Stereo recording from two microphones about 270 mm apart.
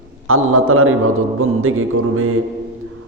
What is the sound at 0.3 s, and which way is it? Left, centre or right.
Mantra, right.